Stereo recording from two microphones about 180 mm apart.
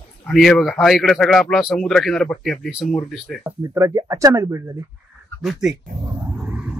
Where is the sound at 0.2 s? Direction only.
Centre (ahead or behind).